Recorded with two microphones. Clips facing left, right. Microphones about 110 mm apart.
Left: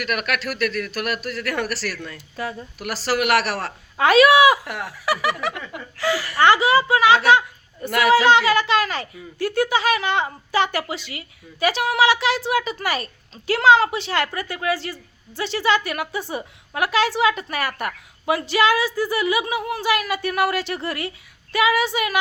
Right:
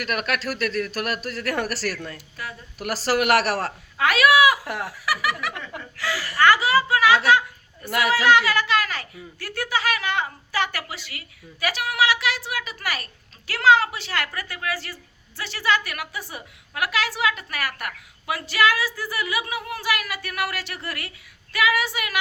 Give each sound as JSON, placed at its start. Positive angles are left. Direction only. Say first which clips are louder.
{"t": 0.0, "sound": "speech", "louder": "left 1 dB", "side_deg": -35}
{"t": 2.1, "sound": "speech", "louder": "left 7 dB", "side_deg": 30}
{"t": 2.7, "sound": "speech", "louder": "right 1 dB", "side_deg": -40}
{"t": 3.9, "sound": "speech", "louder": "left 5 dB", "side_deg": 25}
{"t": 4.6, "sound": "speech", "louder": "right 1 dB", "side_deg": -35}
{"t": 4.9, "sound": "speech", "louder": "left 5 dB", "side_deg": 25}
{"t": 7.3, "sound": "a sound", "louder": "left 3 dB", "side_deg": 25}
{"t": 7.9, "sound": "a woman's voice", "louder": "left 4 dB", "side_deg": -20}
{"t": 8.1, "sound": "speech", "louder": "left 4 dB", "side_deg": 25}